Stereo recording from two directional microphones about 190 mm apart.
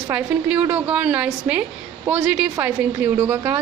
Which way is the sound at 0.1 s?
10° right (ahead or behind).